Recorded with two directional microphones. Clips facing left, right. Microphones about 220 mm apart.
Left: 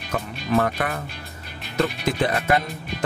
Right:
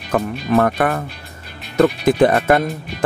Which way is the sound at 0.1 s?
55° right (ahead or behind).